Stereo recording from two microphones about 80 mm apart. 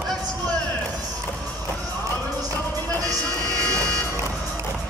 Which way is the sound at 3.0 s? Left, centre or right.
Right.